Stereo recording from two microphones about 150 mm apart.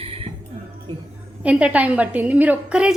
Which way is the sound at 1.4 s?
10° right (ahead or behind).